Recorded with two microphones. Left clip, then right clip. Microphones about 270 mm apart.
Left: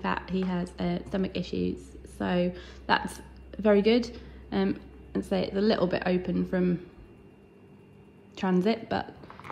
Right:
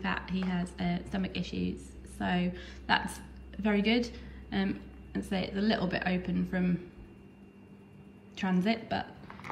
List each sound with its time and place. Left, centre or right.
0.0 s a woman's voice: centre
8.4 s a woman's voice: centre